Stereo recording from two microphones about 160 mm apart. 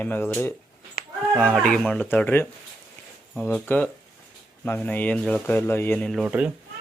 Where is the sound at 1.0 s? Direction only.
70° left (ahead or behind).